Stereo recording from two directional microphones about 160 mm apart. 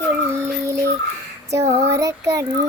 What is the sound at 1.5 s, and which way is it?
Child singing, 20° right (ahead or behind).